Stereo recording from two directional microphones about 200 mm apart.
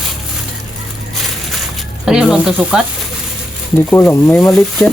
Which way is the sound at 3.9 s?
10° left (ahead or behind).